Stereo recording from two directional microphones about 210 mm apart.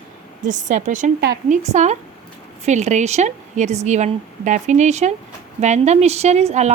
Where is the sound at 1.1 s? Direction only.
55° right (ahead or behind).